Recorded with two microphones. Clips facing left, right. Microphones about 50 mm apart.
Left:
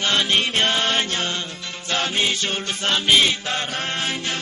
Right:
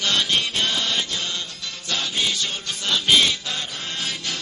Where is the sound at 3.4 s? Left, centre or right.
Left.